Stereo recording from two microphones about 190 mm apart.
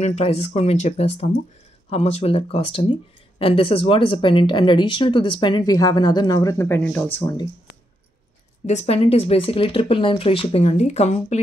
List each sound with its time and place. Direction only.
0.0 s speech: 35° left (ahead or behind); by 7.3 s 10° left (ahead or behind)
8.6 s speech: 35° left (ahead or behind)